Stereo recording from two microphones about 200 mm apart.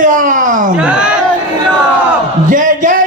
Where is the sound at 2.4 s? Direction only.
40° right (ahead or behind).